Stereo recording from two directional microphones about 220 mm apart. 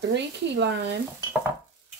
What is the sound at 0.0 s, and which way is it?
Speech, 50° right (ahead or behind).